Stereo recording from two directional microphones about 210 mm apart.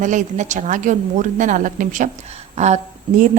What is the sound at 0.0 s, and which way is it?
A woman's voice, 35° right (ahead or behind).